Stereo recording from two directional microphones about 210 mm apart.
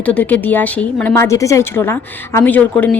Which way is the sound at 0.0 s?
5° left (ahead or behind).